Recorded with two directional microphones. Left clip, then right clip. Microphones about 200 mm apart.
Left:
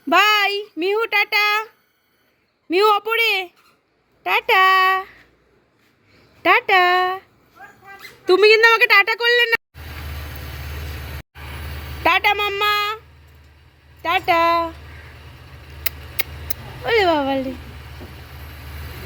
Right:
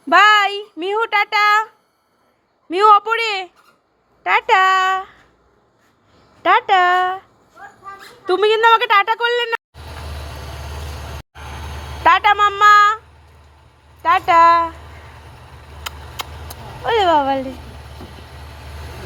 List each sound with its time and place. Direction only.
0.1 s a sound: 15° left (ahead or behind)
2.6 s a child's voice: 20° left (ahead or behind)
6.4 s speech: 20° left (ahead or behind)
8.8 s speech: 20° left (ahead or behind)
12.0 s speech: 20° left (ahead or behind)
14.0 s a child's voice: 15° left (ahead or behind)
16.8 s a child's voice: 20° left (ahead or behind)